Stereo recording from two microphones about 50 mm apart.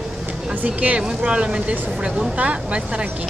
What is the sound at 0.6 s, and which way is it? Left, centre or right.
Speech, right.